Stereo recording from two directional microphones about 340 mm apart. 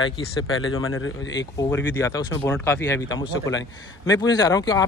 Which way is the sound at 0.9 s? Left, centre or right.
Left.